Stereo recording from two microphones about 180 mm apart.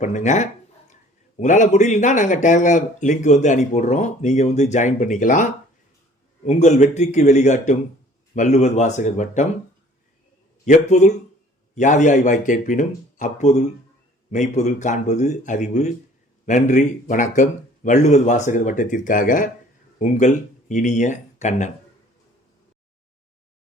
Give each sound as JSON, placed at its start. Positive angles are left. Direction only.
{"t": 0.0, "sound": "speech", "side_deg": 40}
{"t": 10.7, "sound": "speech", "side_deg": 45}